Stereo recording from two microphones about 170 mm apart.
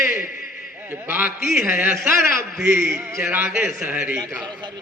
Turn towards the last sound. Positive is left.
turn(degrees=-10)  # may be behind; listen again after turning